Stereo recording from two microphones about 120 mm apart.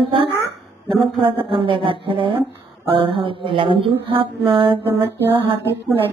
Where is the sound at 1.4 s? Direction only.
45° right (ahead or behind).